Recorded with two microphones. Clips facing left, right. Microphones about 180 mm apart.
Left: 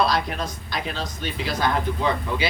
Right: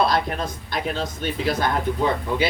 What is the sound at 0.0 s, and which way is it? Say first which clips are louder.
Speech: right 1 dB; 55° right (ahead or behind).